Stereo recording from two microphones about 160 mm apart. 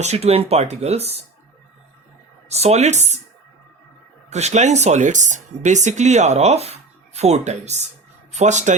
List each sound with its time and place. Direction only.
0.0 s speech: 40° right (ahead or behind)
2.5 s speech: 40° right (ahead or behind)
4.3 s speech: 45° right (ahead or behind)